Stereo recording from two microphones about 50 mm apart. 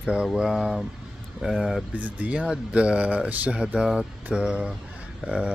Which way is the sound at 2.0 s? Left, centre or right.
Right.